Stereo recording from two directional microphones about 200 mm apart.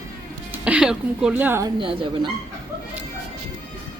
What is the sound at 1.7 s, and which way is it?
Speech, 25° right (ahead or behind).